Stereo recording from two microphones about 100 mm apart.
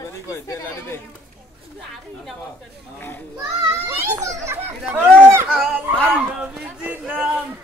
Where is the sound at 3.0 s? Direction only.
20° left (ahead or behind).